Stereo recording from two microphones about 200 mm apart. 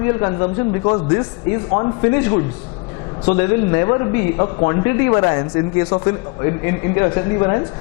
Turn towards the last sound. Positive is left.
turn(degrees=25)  # may be behind; listen again after turning